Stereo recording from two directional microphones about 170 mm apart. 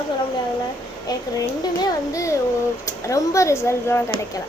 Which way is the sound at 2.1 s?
20° left (ahead or behind).